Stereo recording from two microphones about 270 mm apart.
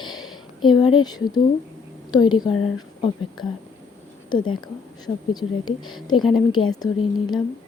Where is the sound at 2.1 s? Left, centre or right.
Centre.